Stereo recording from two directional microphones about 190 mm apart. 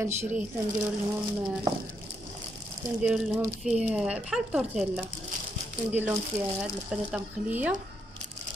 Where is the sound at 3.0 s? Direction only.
5° right (ahead or behind).